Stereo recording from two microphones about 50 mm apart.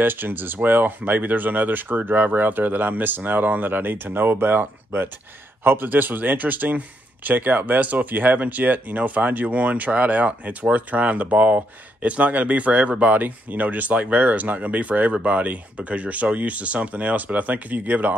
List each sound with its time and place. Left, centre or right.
0.0 s speech: right